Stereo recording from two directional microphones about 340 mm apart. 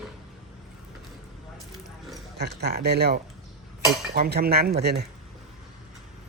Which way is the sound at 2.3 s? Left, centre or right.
Right.